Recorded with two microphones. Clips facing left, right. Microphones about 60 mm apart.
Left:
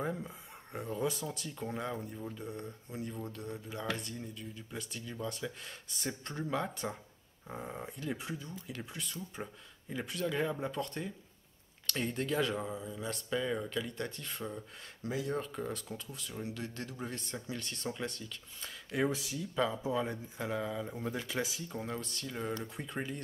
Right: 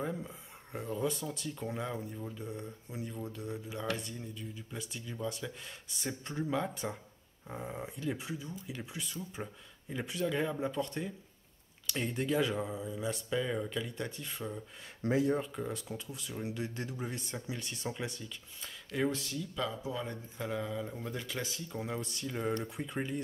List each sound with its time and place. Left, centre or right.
0.0 s speech: centre
15.0 s speech: right
15.3 s speech: centre
18.9 s speech: centre
19.5 s speech: left
20.1 s speech: centre
22.0 s speech: centre
22.3 s speech: centre